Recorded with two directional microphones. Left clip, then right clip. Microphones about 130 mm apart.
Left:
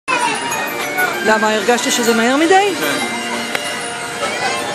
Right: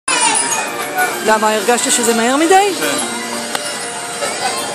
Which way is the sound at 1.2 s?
10° right (ahead or behind).